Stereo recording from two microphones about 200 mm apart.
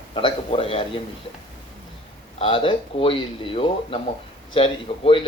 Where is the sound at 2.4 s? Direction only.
25° left (ahead or behind).